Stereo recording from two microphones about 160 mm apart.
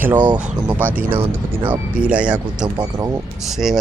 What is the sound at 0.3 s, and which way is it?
Speech, 5° right (ahead or behind).